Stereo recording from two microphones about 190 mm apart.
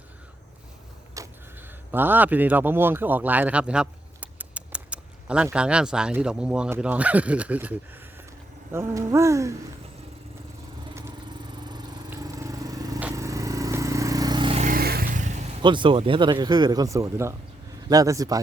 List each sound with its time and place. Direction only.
1.2 s a sound: 15° right (ahead or behind)
1.9 s a man's voice: 10° right (ahead or behind)
12.1 s a sound: 15° right (ahead or behind)
13.0 s vehicle: 10° right (ahead or behind)
14.6 s vehicle: 50° right (ahead or behind)
15.6 s speech: 25° right (ahead or behind)